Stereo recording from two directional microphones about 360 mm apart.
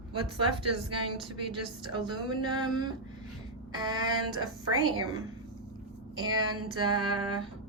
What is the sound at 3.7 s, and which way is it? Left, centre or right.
Speech, centre.